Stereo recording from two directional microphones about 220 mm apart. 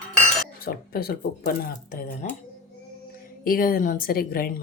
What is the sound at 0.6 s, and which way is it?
Speech, 45° left (ahead or behind).